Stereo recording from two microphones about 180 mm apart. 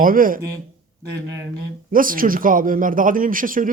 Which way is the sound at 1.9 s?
50° right (ahead or behind).